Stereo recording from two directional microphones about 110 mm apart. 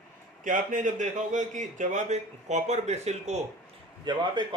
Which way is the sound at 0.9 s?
90° right.